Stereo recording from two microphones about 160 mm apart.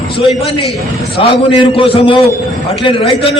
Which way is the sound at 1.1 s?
35° left (ahead or behind).